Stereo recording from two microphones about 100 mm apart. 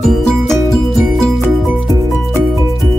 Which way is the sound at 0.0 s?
5° left (ahead or behind).